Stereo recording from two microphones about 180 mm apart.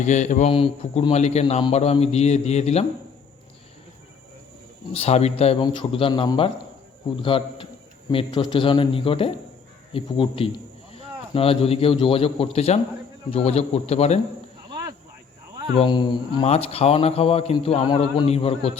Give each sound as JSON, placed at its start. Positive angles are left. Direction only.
{"t": 0.0, "sound": "speech", "side_deg": 40}
{"t": 4.9, "sound": "a man's voice", "side_deg": 35}
{"t": 15.7, "sound": "speech", "side_deg": 30}